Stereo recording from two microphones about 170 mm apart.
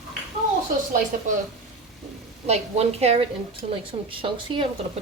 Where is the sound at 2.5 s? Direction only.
40° right (ahead or behind).